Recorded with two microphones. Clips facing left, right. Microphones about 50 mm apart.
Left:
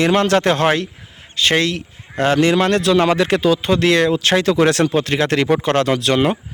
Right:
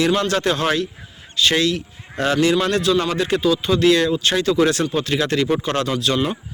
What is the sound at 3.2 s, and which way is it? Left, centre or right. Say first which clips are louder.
A man's voice: left 3 dB; left.